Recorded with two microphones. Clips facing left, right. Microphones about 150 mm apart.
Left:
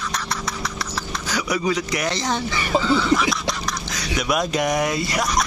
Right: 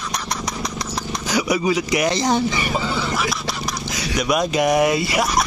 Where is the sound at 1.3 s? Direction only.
10° right (ahead or behind).